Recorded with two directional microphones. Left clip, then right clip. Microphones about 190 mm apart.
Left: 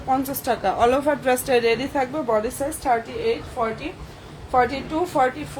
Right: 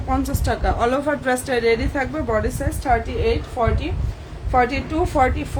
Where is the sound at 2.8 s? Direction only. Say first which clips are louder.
Right 3 dB; 15° right (ahead or behind).